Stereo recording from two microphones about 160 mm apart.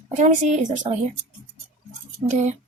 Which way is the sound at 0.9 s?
40° right (ahead or behind).